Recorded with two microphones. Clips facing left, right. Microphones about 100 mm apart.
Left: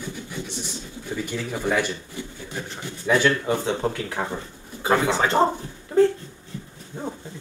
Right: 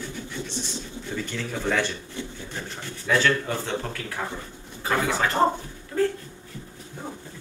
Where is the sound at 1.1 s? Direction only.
10° left (ahead or behind); by 6.1 s 30° left (ahead or behind).